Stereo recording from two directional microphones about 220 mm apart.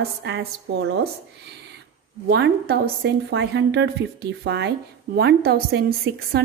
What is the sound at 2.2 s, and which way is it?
Speech, 50° right (ahead or behind).